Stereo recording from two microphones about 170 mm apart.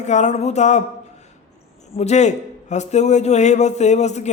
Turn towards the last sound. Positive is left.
turn(degrees=40)  # may be behind; listen again after turning